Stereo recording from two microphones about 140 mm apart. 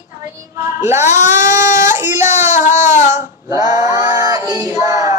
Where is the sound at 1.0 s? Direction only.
60° left (ahead or behind).